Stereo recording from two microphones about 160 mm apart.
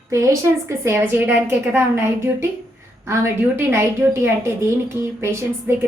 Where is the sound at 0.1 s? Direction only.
20° right (ahead or behind).